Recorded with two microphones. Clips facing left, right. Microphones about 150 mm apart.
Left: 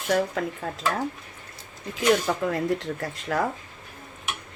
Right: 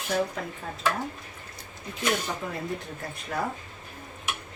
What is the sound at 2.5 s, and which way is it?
Speech, 90° left.